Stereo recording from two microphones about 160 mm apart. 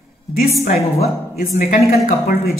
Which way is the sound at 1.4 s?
55° left (ahead or behind).